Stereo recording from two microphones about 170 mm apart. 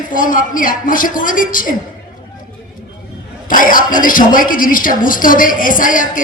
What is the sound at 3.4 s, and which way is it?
Speech, 55° left (ahead or behind).